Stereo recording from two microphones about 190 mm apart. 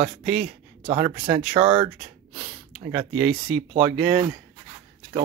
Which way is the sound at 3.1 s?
5° right (ahead or behind).